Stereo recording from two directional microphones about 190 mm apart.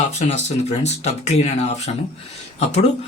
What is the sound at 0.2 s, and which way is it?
Speech, 35° left (ahead or behind).